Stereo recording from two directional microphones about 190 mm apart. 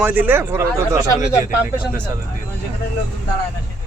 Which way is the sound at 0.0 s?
10° right (ahead or behind).